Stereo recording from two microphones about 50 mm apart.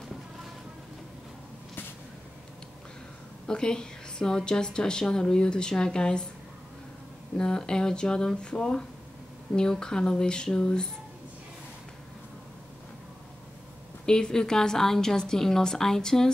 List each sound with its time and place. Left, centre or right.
3.4 s a woman's voice: centre
7.3 s a woman's voice: centre
14.0 s a woman's voice: centre